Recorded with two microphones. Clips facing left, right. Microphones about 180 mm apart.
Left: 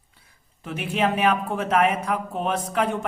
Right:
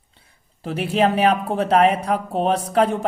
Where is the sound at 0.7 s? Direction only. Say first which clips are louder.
Right 5 dB; 35° right (ahead or behind).